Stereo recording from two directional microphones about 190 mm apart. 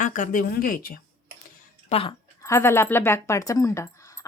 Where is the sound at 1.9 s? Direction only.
30° left (ahead or behind).